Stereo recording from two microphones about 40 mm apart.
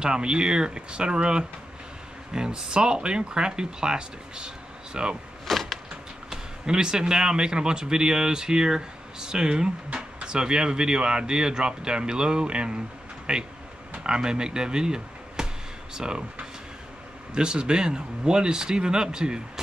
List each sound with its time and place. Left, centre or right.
0.0 s speech: right
5.5 s door: centre
6.3 s speech: centre
17.3 s speech: right